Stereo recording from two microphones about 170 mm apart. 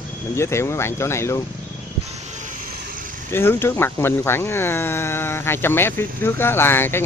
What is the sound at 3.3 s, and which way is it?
Speech, 15° left (ahead or behind).